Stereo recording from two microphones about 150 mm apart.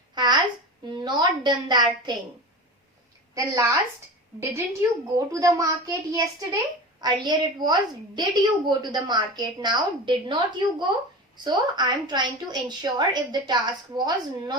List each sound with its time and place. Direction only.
0.1 s babbling: 30° right (ahead or behind)
0.9 s a woman's voice: 30° right (ahead or behind)
3.3 s a woman's voice: 20° right (ahead or behind)